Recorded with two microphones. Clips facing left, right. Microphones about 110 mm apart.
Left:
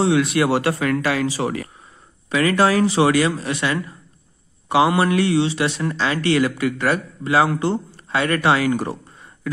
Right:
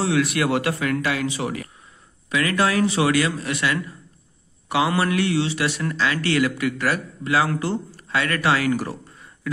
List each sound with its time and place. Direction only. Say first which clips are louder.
0.0 s a man's voice: left 4 dB; 25° left (ahead or behind)